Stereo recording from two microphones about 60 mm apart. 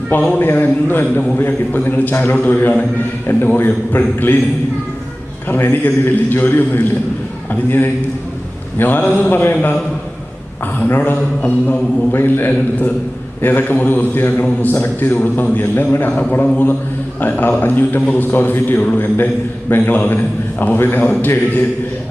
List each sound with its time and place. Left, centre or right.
0.3 s a man's voice: left
5.5 s a man's voice: left
8.8 s a man's voice: left
10.8 s a man's voice: left